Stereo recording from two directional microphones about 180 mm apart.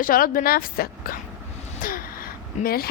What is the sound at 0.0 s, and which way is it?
A woman's voice, 50° left (ahead or behind).